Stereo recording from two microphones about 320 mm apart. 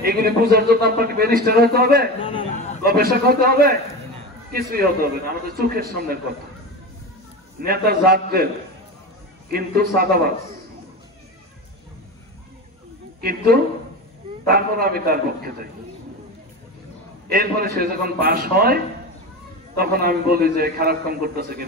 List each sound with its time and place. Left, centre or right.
0.0 s speech: right
2.2 s a sound: centre
2.8 s speech: right
7.6 s speech: right
9.5 s speech: right
13.2 s speech: right
17.3 s speech: right
19.8 s speech: right